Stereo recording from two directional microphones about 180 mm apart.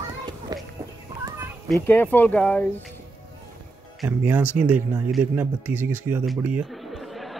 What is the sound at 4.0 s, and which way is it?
Speech, 10° right (ahead or behind).